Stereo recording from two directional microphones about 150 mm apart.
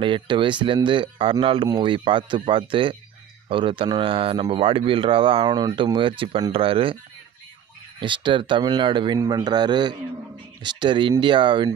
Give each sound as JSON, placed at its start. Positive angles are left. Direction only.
{"t": 0.0, "sound": "speech", "side_deg": -35}
{"t": 8.0, "sound": "a man's voice", "side_deg": -35}